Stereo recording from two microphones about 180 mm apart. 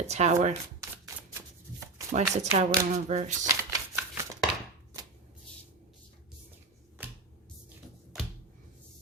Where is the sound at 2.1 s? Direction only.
40° right (ahead or behind).